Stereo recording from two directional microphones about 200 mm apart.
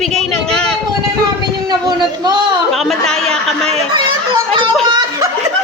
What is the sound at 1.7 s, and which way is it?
Speech, 20° right (ahead or behind).